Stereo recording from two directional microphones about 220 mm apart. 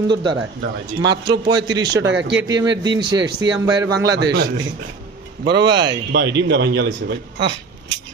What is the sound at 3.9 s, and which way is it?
A man's voice, 50° right (ahead or behind).